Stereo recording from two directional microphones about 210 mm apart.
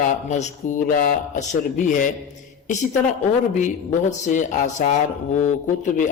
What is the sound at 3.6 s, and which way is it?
Speech, 35° left (ahead or behind).